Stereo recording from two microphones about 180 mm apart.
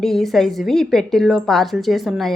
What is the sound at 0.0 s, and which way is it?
A woman's voice, centre (ahead or behind).